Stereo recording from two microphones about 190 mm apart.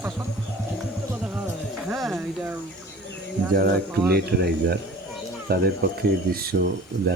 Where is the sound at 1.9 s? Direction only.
Centre (ahead or behind).